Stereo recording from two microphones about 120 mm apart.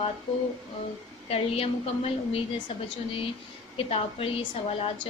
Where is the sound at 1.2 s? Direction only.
55° left (ahead or behind).